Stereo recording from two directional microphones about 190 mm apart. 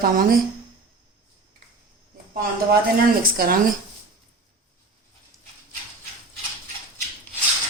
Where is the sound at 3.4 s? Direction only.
50° right (ahead or behind).